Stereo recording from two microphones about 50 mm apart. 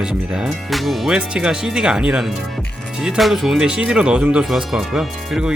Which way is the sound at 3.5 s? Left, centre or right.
Centre.